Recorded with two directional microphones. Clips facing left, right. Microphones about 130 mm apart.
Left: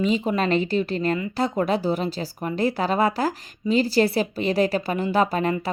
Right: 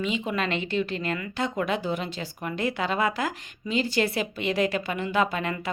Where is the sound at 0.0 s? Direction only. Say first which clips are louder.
Left 6 dB; 35° left (ahead or behind).